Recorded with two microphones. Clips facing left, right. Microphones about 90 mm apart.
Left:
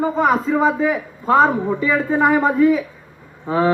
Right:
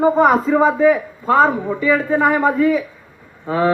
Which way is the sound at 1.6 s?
20° left (ahead or behind).